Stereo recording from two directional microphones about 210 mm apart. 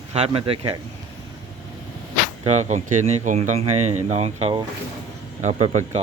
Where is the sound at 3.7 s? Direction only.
90° right.